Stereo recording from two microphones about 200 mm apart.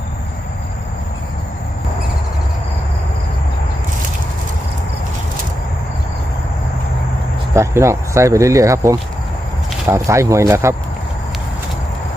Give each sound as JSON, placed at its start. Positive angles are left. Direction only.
{"t": 7.5, "sound": "speech", "side_deg": -15}